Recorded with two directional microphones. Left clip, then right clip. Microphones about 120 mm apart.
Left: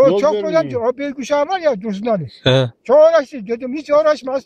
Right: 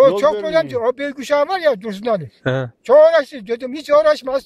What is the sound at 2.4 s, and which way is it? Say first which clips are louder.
Speech: left 10 dB; 20° left (ahead or behind).